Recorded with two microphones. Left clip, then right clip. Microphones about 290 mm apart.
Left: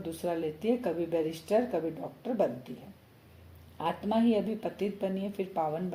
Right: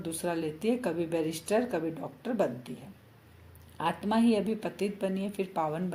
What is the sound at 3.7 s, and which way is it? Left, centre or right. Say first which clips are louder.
Speech: right 1 dB; right.